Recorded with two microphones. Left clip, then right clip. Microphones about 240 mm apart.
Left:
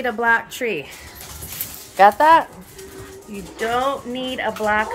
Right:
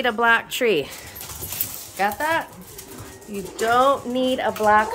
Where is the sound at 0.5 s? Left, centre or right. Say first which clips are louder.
Right 4 dB; right.